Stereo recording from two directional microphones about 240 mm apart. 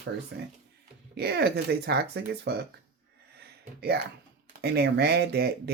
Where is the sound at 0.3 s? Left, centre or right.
Right.